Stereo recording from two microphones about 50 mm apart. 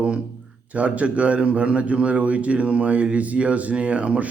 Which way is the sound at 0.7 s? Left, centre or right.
Right.